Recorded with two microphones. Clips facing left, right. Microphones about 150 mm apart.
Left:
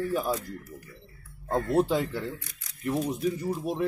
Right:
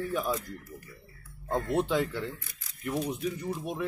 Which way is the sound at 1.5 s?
35° left (ahead or behind).